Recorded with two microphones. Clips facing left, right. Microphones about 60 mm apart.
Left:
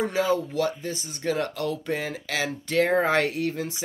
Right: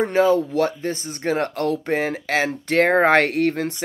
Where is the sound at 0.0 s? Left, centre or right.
Right.